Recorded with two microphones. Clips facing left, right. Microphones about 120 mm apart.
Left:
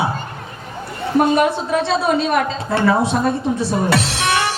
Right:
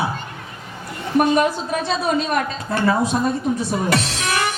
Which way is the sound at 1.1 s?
25° left (ahead or behind).